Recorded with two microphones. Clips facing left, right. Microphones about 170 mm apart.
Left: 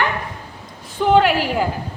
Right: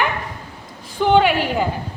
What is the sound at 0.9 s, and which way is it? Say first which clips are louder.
Speech: even; centre (ahead or behind).